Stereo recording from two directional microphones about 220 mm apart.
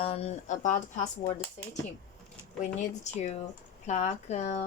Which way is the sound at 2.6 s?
30° left (ahead or behind).